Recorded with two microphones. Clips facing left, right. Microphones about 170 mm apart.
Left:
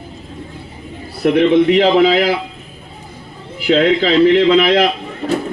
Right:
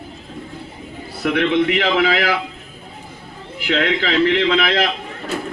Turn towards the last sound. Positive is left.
turn(degrees=35)  # may be behind; listen again after turning